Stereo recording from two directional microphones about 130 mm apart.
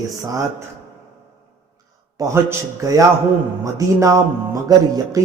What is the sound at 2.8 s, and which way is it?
Speech, 25° right (ahead or behind).